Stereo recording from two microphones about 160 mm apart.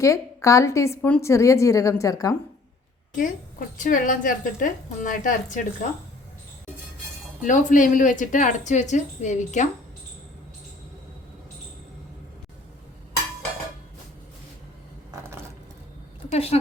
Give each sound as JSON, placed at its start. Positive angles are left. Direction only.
{"t": 0.0, "sound": "a woman's voice", "side_deg": 20}
{"t": 3.8, "sound": "a woman's voice", "side_deg": 55}
{"t": 7.4, "sound": "speech", "side_deg": 55}
{"t": 16.3, "sound": "speech", "side_deg": 40}